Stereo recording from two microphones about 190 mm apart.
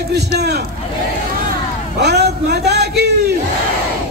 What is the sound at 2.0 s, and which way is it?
Speech, 60° right (ahead or behind).